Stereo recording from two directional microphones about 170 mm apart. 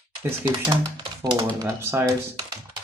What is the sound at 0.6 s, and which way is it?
Speech, 20° right (ahead or behind).